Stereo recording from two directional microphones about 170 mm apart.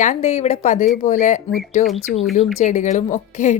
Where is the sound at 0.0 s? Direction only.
45° left (ahead or behind).